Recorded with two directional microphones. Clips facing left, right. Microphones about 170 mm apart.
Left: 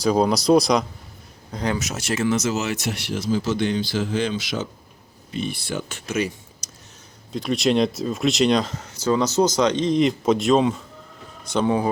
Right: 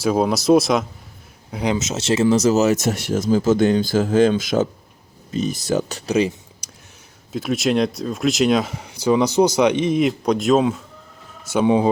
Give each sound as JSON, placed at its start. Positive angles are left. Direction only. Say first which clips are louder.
{"t": 0.0, "sound": "speech", "louder": "right 1 dB", "side_deg": -5}
{"t": 1.5, "sound": "speech", "louder": "right 4 dB", "side_deg": -15}
{"t": 7.3, "sound": "speech", "louder": "right 1 dB", "side_deg": 0}